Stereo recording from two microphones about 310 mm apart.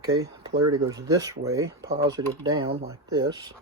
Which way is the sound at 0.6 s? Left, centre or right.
Right.